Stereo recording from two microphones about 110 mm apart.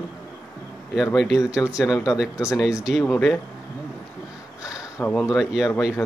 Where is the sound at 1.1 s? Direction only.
5° right (ahead or behind).